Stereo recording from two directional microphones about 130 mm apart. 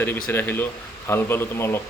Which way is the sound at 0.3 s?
15° left (ahead or behind).